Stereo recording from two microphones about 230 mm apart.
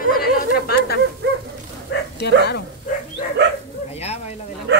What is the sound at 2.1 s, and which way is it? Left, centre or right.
Speech, left.